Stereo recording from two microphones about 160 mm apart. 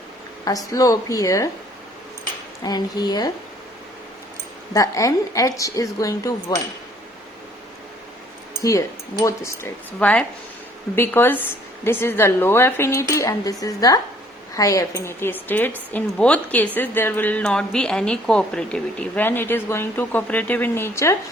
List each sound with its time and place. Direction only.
0.4 s a woman's voice: 20° left (ahead or behind)
2.6 s a woman's voice: 25° left (ahead or behind)
4.7 s a woman's voice: 20° left (ahead or behind)
8.6 s a woman's voice: 20° left (ahead or behind)